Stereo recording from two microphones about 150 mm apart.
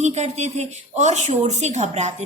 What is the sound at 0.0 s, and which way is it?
A woman's voice, 50° right (ahead or behind).